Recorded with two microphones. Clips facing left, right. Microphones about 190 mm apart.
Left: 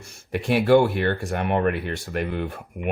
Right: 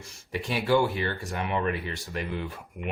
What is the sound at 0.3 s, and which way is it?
Speech, 60° left (ahead or behind).